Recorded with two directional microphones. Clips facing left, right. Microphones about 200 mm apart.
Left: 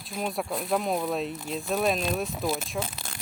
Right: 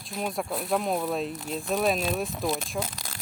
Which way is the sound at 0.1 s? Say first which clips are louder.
Even; centre (ahead or behind).